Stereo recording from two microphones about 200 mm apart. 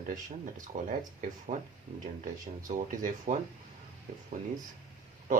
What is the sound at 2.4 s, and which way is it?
Speech, 40° right (ahead or behind).